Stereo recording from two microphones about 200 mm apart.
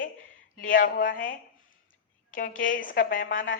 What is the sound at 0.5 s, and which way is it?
Speech, 45° left (ahead or behind).